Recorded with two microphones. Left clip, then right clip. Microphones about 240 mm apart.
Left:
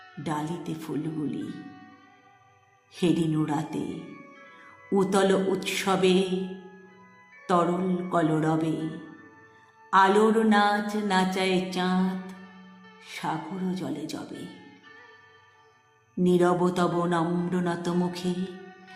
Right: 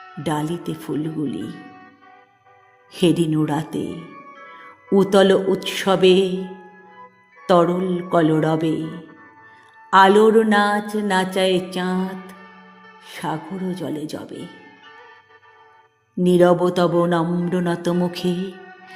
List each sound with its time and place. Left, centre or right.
0.2 s mantra: right
2.9 s mantra: right
4.1 s music: left
4.9 s mantra: right
7.4 s music: right
8.1 s mantra: right
9.9 s mantra: right
13.1 s mantra: right
16.2 s mantra: right